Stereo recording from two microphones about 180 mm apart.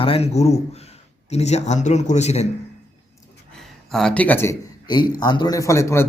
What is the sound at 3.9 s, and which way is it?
Speech, 5° left (ahead or behind).